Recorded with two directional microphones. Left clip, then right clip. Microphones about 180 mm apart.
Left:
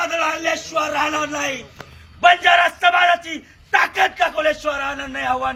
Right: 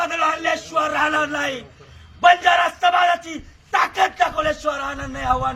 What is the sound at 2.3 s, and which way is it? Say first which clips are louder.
Battle cry: left 2 dB; centre (ahead or behind).